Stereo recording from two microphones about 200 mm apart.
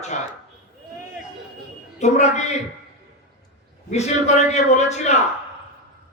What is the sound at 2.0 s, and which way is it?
Speech, 35° left (ahead or behind).